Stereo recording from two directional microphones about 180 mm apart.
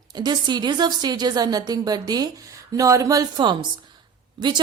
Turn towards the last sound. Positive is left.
turn(degrees=-25)  # may be behind; listen again after turning